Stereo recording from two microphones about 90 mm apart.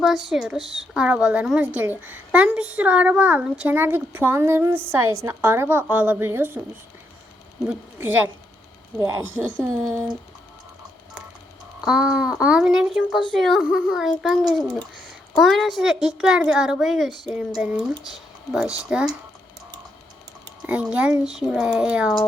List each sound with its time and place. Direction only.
0.0 s a child's voice: centre (ahead or behind); by 6.6 s 25° right (ahead or behind)
9.0 s speech: 35° right (ahead or behind)
11.9 s speech: 10° right (ahead or behind)
20.7 s speech: 15° right (ahead or behind)